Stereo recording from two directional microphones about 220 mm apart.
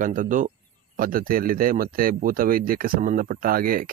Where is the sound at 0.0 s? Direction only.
40° right (ahead or behind).